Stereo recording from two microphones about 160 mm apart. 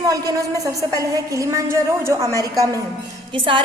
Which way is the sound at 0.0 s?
20° right (ahead or behind).